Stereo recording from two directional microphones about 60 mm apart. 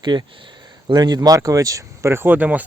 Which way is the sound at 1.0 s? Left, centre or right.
Right.